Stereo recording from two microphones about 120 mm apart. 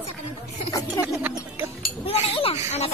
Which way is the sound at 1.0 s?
15° right (ahead or behind).